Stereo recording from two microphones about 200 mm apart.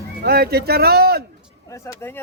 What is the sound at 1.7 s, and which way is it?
Speech, 15° left (ahead or behind).